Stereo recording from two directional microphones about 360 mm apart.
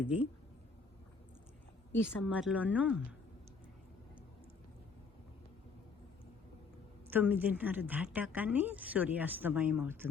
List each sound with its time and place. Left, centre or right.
0.0 s speech: centre
1.9 s speech: centre
7.1 s speech: centre